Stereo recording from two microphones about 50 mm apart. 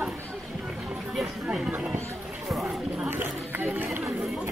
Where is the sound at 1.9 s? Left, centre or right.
Right.